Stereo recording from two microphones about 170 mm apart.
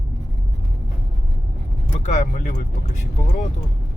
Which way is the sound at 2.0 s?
45° left (ahead or behind).